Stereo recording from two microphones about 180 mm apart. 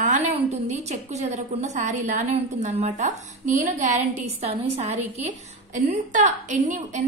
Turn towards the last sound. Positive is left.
turn(degrees=-45)  # may be behind; listen again after turning